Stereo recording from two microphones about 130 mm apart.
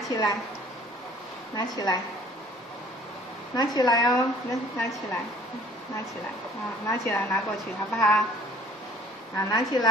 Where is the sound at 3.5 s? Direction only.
30° left (ahead or behind).